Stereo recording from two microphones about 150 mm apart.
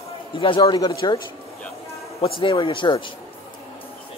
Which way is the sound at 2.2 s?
35° left (ahead or behind).